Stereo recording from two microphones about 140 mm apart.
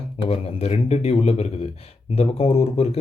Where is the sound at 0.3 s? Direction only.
50° left (ahead or behind).